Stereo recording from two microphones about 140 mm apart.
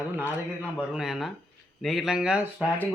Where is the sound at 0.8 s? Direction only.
5° right (ahead or behind).